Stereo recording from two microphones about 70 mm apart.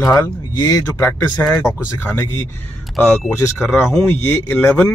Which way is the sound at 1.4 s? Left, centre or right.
Left.